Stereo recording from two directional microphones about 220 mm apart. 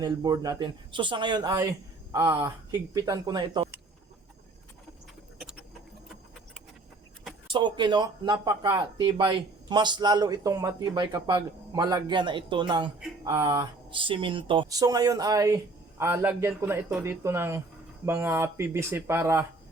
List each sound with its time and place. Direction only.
0.0 s speech: 15° right (ahead or behind)
7.5 s speech: 20° right (ahead or behind)